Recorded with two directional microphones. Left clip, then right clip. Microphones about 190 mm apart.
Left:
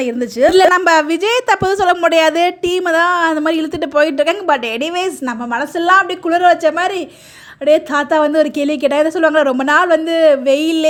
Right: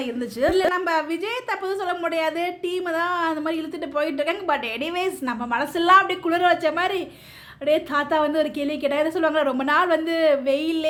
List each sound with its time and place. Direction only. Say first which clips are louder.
0.0 s a woman's voice: left 10 dB; 35° left (ahead or behind)